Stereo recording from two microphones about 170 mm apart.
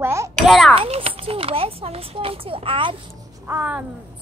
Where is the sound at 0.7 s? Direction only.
35° right (ahead or behind).